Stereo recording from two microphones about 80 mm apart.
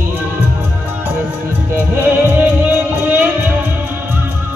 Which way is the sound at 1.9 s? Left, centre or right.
Right.